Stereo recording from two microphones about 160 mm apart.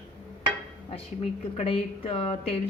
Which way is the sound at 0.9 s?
40° left (ahead or behind).